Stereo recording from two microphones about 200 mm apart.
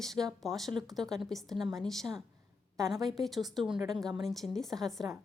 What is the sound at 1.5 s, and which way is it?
Speech, 20° right (ahead or behind).